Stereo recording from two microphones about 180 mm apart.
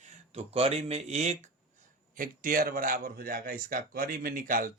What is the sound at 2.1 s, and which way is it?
Speech, 50° right (ahead or behind).